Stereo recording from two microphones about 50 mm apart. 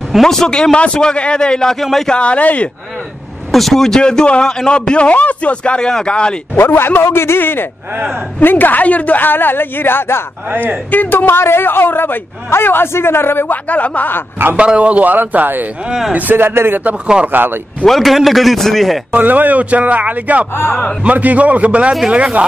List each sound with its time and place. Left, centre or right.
0.2 s a man's voice: centre
2.0 s speech: left
3.5 s a man's voice: centre
6.5 s speech: left
8.4 s a man's voice: left
10.5 s a man's voice: right
10.9 s speech: left
13.5 s a man's voice: left
14.6 s a man's voice: right
17.8 s a man's voice: centre
19.1 s a man's voice: right